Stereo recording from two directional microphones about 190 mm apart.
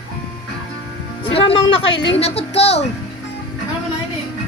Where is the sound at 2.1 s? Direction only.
30° left (ahead or behind).